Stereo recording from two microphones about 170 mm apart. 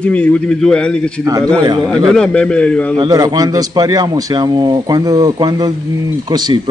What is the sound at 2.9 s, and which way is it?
Speech, 25° right (ahead or behind).